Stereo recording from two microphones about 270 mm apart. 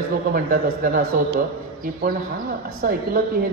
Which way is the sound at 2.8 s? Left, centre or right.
Right.